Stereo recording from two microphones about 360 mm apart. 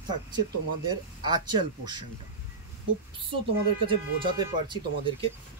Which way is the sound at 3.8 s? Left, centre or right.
Centre.